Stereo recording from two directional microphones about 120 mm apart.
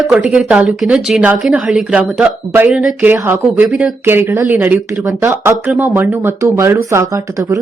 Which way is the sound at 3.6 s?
5° right (ahead or behind).